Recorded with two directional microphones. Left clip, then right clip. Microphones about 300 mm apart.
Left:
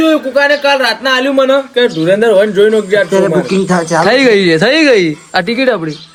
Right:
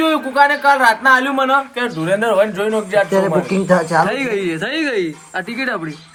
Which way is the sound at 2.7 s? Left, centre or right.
Right.